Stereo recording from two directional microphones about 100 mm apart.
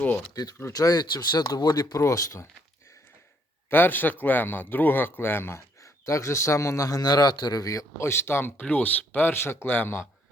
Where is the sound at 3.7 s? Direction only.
20° left (ahead or behind).